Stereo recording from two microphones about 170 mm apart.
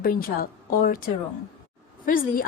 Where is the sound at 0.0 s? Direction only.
60° left (ahead or behind).